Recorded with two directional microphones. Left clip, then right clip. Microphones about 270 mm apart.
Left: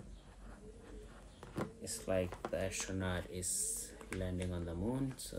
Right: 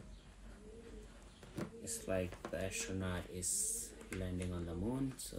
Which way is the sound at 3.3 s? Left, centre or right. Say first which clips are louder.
Even; left.